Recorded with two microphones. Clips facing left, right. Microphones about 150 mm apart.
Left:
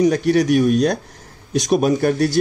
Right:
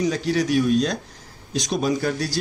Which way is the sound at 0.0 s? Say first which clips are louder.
Left 7 dB; 60° left (ahead or behind).